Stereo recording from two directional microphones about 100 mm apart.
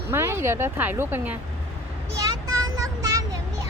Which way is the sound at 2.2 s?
40° right (ahead or behind).